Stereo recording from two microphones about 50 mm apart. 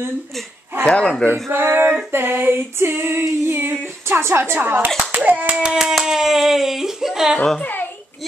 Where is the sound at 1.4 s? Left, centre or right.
Right.